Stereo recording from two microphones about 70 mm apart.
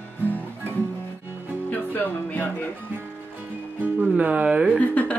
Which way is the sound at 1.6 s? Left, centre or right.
Left.